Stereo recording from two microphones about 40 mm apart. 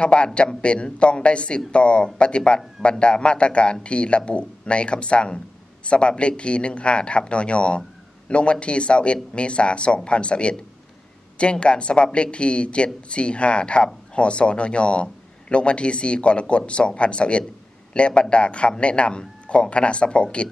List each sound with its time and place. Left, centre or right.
0.0 s speech: left
11.5 s speech: left